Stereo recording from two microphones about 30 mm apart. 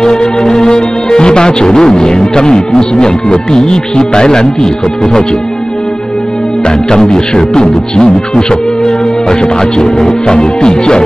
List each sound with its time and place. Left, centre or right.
0.0 s speech: left
6.6 s speech: left